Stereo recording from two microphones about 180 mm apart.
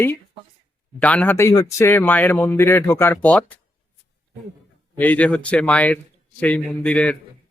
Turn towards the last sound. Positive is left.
turn(degrees=5)  # may be behind; listen again after turning